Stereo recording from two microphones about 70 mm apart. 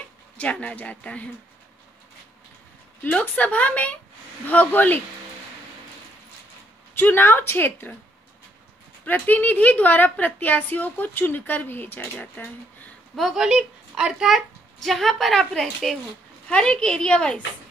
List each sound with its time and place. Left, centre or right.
0.4 s a woman's voice: centre
3.0 s a woman's voice: left
7.0 s a woman's voice: left
9.0 s a woman's voice: left
13.1 s a child's voice: centre